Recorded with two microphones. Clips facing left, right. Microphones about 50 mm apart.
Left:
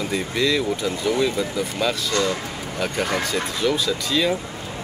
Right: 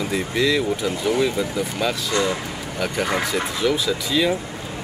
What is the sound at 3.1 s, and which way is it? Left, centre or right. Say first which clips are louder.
Speech: right 1 dB; centre.